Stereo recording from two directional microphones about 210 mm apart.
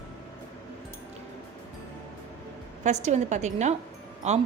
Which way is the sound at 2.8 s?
35° right (ahead or behind).